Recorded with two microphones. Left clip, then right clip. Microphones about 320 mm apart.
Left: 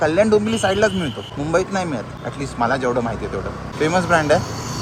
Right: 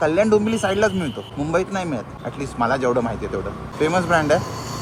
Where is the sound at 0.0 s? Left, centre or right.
Centre.